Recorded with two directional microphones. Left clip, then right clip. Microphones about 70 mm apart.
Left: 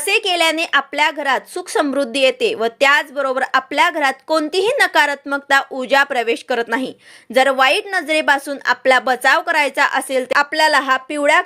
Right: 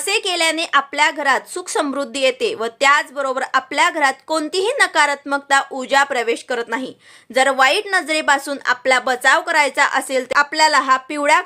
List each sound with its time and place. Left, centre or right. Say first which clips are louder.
0.2 s speech: left 2 dB; left
5.9 s speech: left 1 dB; left
7.3 s speech: left 1 dB; left
7.9 s speech: left 1 dB; left